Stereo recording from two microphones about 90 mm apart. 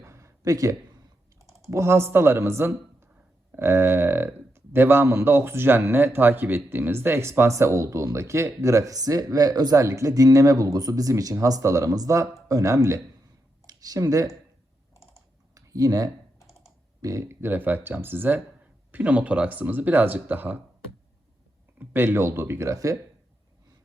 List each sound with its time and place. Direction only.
0.0 s a sound: 35° right (ahead or behind)
1.7 s speech: 30° right (ahead or behind)
15.5 s speech: 40° right (ahead or behind); by 20.6 s 20° right (ahead or behind)
21.8 s speech: 25° right (ahead or behind)